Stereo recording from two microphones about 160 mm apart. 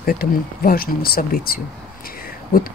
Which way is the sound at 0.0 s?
65° left (ahead or behind).